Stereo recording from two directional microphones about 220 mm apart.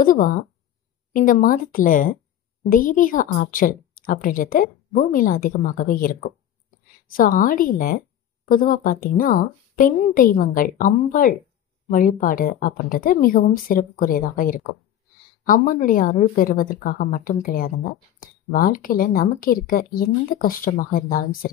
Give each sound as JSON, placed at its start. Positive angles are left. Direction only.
{"t": 0.0, "sound": "a woman's voice", "side_deg": 35}